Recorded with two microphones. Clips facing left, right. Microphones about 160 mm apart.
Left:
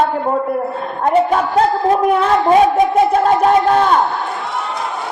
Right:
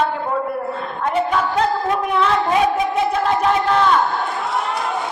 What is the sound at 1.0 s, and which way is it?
A man's voice, 45° left (ahead or behind).